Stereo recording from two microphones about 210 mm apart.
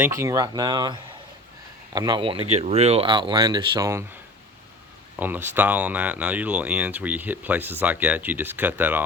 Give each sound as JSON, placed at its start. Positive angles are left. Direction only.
{"t": 0.0, "sound": "speech", "side_deg": -15}
{"t": 5.2, "sound": "speech", "side_deg": -10}